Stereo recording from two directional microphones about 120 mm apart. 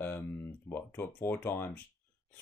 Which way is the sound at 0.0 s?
15° left (ahead or behind).